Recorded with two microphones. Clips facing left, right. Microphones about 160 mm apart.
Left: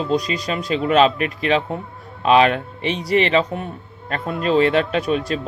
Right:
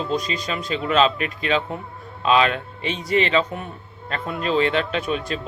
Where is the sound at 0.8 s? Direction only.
50° left (ahead or behind).